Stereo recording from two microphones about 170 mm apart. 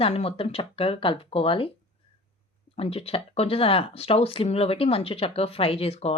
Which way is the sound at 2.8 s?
35° left (ahead or behind).